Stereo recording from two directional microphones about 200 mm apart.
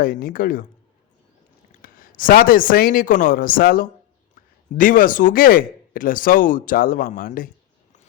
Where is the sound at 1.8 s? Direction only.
45° left (ahead or behind).